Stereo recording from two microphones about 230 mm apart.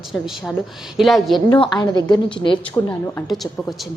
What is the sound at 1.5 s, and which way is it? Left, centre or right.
A woman's voice, centre.